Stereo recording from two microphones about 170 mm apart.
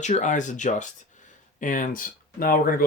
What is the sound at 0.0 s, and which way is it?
Speech, 45° left (ahead or behind).